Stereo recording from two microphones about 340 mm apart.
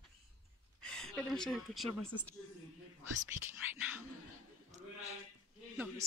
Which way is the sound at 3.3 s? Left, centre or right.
Centre.